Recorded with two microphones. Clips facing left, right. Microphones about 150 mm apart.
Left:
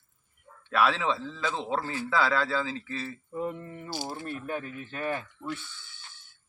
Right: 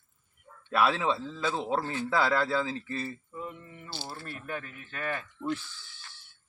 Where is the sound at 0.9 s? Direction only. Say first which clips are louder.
Even; 10° right (ahead or behind).